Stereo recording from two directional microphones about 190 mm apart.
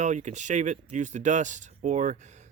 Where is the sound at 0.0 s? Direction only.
40° right (ahead or behind).